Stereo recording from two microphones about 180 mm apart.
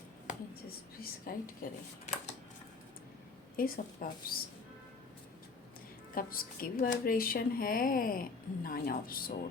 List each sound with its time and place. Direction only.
0.9 s a sound: 55° left (ahead or behind)
3.6 s speech: 55° left (ahead or behind)
6.1 s speech: 55° left (ahead or behind)